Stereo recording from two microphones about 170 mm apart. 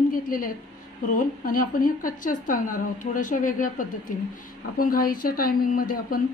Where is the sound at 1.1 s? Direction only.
55° left (ahead or behind).